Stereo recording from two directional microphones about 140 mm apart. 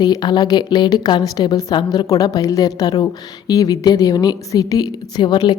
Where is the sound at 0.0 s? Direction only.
30° left (ahead or behind).